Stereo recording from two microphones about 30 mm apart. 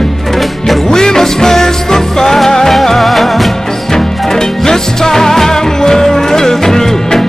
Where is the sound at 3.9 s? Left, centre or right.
Centre.